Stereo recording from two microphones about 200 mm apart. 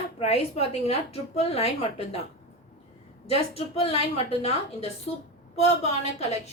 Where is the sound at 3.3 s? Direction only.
30° left (ahead or behind).